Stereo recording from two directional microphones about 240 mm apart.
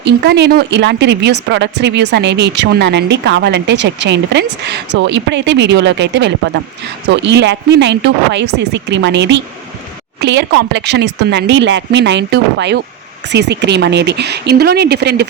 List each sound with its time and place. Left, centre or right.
0.0 s speech: right